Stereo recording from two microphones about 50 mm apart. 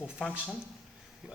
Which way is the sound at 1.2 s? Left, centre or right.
Centre.